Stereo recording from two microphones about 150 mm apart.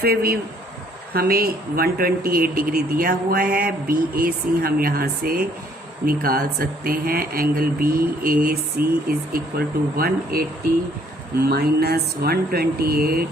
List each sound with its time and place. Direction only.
0.0 s a man's voice: 85° right